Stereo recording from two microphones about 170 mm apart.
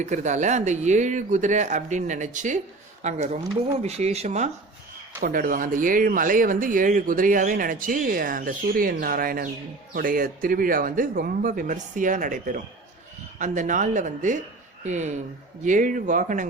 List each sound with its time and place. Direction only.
0.0 s speech: 45° right (ahead or behind)
5.2 s speech: 55° right (ahead or behind)